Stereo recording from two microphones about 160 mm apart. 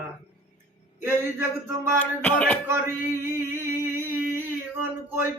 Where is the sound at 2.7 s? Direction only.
15° right (ahead or behind).